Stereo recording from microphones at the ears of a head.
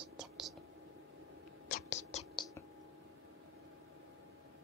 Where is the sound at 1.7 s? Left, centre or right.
Left.